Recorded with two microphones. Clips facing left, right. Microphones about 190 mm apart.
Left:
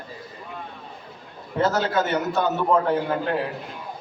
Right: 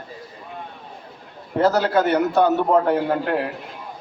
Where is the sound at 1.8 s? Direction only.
65° right (ahead or behind).